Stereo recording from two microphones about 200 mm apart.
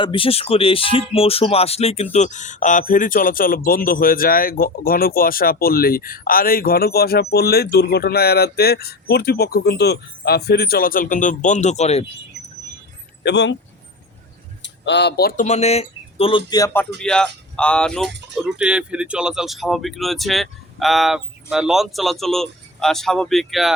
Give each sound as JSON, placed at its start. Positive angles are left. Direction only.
{"t": 0.0, "sound": "speech", "side_deg": 25}
{"t": 13.2, "sound": "speech", "side_deg": 60}
{"t": 14.6, "sound": "speech", "side_deg": 60}
{"t": 17.0, "sound": "speech", "side_deg": 5}